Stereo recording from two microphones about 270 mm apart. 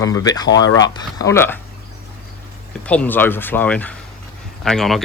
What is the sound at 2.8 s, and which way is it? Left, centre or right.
Speech, centre.